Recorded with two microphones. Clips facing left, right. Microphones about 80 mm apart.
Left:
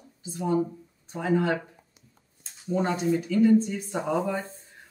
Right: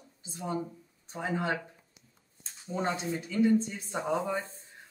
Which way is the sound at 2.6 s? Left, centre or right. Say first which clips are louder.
Left 6 dB; right.